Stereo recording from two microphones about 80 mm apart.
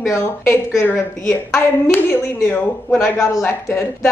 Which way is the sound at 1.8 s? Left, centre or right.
Left.